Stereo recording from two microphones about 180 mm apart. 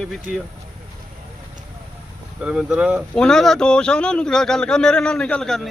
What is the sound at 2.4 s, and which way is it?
A man's voice, 5° right (ahead or behind).